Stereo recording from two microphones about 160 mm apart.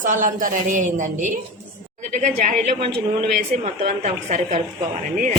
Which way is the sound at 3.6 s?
45° right (ahead or behind).